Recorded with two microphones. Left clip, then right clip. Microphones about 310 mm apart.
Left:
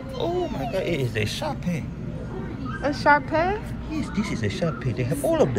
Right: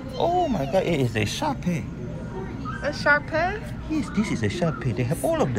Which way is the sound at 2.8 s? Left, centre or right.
Left.